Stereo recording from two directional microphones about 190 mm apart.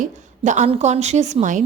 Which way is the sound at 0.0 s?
40° right (ahead or behind).